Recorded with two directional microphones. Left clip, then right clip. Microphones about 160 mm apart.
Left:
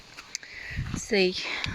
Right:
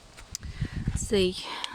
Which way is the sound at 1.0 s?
25° right (ahead or behind).